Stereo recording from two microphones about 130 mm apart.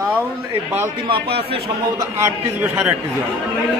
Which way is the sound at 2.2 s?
15° right (ahead or behind).